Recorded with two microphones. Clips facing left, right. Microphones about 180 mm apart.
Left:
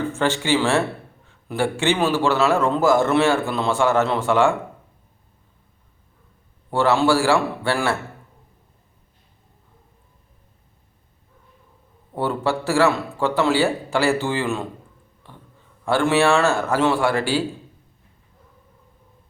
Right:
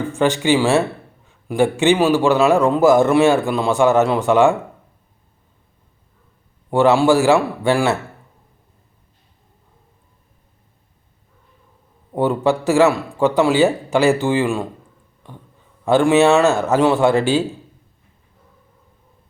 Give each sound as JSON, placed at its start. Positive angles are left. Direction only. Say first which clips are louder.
{"t": 0.1, "sound": "a man's voice", "louder": "right 7 dB", "side_deg": -15}
{"t": 6.7, "sound": "a man's voice", "louder": "right 4 dB", "side_deg": -15}
{"t": 12.1, "sound": "a man's voice", "louder": "right 5 dB", "side_deg": -20}
{"t": 15.2, "sound": "a sound", "louder": "right 5 dB", "side_deg": -15}
{"t": 15.8, "sound": "a man's voice", "louder": "right 5 dB", "side_deg": -20}